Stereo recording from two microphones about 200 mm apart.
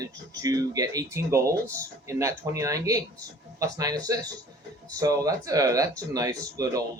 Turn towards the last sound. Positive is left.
turn(degrees=-15)  # may be behind; listen again after turning